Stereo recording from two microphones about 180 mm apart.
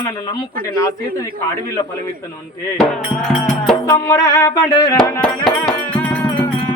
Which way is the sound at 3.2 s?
5° left (ahead or behind).